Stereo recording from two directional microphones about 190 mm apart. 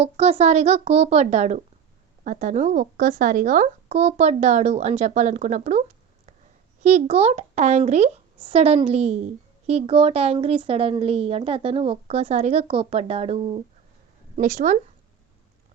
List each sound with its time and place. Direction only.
0.0 s a woman's voice: 30° right (ahead or behind)
6.8 s a woman's voice: 35° right (ahead or behind)